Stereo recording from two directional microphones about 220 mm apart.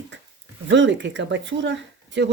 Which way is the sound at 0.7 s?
55° right (ahead or behind).